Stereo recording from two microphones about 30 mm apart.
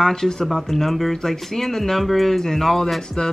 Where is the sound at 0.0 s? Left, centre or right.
Centre.